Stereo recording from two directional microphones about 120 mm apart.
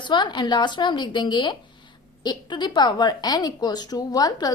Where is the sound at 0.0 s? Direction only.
40° left (ahead or behind).